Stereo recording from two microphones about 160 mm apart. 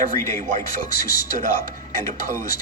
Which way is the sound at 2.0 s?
55° right (ahead or behind).